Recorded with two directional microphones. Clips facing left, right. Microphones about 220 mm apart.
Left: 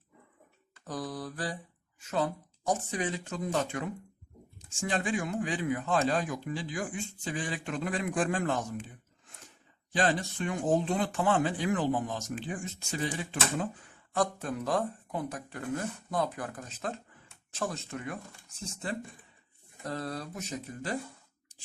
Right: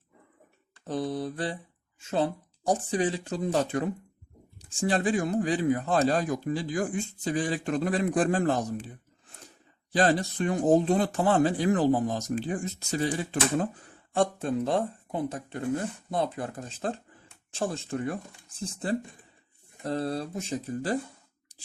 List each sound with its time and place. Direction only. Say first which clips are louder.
0.9 s speech: right 7 dB; 25° right (ahead or behind)
9.9 s speech: right 5 dB; 40° right (ahead or behind)
14.1 s speech: right 5 dB; 30° right (ahead or behind)